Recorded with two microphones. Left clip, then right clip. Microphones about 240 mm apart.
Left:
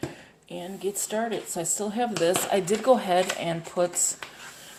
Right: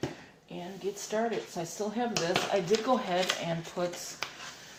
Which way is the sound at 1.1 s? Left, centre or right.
Left.